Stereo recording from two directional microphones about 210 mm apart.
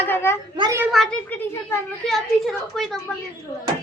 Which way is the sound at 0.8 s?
Centre (ahead or behind).